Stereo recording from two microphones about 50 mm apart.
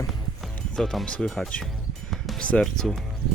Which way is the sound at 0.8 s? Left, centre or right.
Centre.